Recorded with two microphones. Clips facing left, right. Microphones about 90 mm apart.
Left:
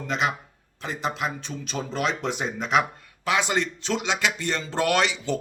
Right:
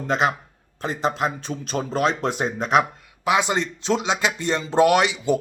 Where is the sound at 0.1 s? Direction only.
35° right (ahead or behind).